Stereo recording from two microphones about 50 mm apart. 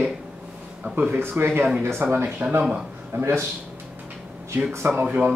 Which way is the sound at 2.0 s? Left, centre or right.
Right.